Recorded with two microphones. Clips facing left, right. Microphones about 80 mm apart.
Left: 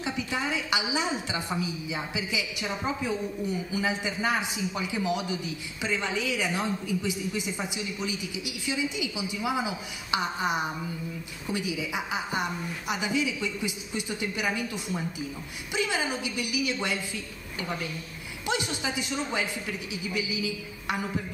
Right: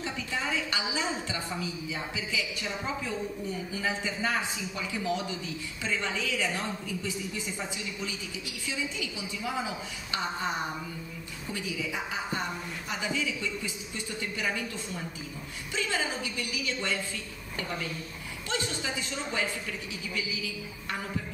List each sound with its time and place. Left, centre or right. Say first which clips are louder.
0.0 s a man's voice: left 3 dB; centre
18.5 s a man's voice: left 3 dB; centre